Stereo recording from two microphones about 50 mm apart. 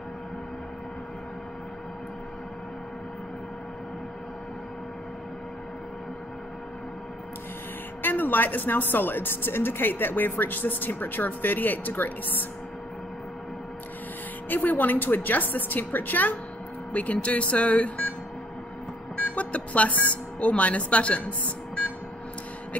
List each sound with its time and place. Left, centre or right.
8.0 s speech: left
14.5 s speech: left
19.1 s speech: left